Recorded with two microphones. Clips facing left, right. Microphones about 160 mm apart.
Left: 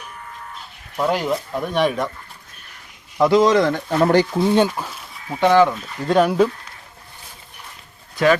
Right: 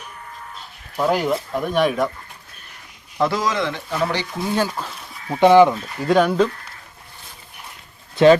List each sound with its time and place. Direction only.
0.9 s speech: centre (ahead or behind)
3.2 s a man's voice: 15° left (ahead or behind)
3.4 s speech: 40° left (ahead or behind)
4.4 s speech: 25° left (ahead or behind)
5.3 s speech: 15° right (ahead or behind)
6.0 s speech: centre (ahead or behind)
8.1 s speech: 25° right (ahead or behind)